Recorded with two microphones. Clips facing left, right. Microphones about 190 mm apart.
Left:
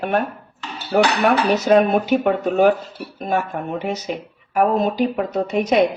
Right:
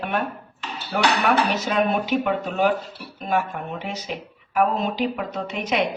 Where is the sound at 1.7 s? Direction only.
45° left (ahead or behind).